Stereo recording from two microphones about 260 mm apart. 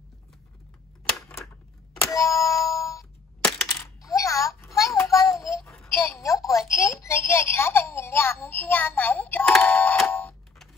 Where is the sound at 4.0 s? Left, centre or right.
Centre.